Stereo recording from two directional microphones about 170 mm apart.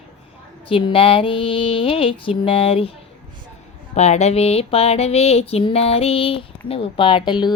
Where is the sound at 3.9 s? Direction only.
40° left (ahead or behind).